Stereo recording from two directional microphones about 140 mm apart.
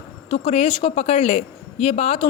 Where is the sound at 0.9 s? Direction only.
50° left (ahead or behind).